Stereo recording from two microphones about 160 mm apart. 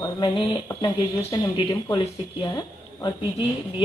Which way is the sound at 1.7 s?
25° left (ahead or behind).